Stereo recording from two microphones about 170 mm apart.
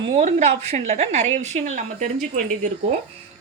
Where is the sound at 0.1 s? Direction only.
40° right (ahead or behind).